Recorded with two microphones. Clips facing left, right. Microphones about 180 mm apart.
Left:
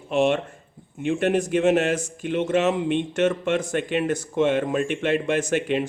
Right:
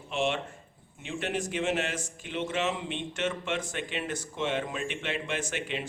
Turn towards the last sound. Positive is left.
turn(degrees=45)  # may be behind; listen again after turning